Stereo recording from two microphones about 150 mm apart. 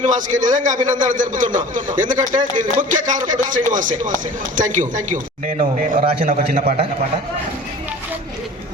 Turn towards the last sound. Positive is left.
turn(degrees=-45)  # may be behind; listen again after turning